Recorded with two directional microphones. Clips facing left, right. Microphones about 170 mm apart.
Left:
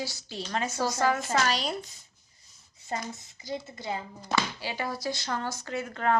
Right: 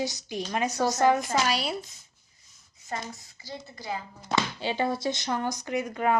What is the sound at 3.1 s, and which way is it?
Speech, 20° left (ahead or behind).